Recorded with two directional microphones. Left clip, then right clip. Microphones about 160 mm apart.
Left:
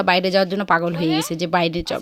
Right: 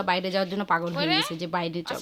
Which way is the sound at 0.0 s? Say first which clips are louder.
Left 8 dB; 40° left (ahead or behind).